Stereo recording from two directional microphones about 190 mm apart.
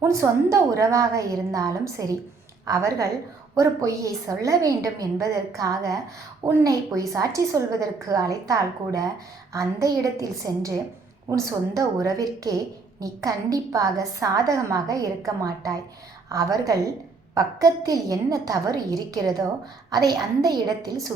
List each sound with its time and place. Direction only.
0.0 s a woman's voice: 15° right (ahead or behind)